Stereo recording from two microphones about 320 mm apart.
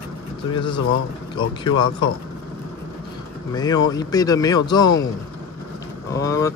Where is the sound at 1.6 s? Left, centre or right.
Centre.